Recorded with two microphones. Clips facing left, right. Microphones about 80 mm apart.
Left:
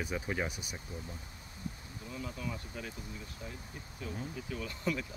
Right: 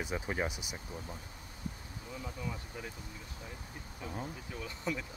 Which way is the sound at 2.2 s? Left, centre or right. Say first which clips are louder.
Left 1 dB; centre.